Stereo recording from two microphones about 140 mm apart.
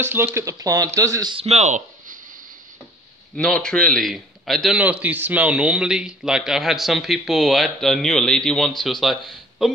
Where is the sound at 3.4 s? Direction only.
5° left (ahead or behind).